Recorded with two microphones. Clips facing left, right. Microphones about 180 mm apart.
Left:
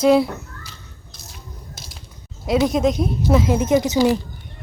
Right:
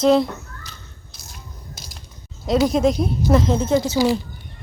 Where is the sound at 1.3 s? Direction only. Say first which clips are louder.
Even; centre (ahead or behind).